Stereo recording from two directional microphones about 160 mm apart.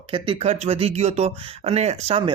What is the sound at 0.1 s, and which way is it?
Speech, 35° right (ahead or behind).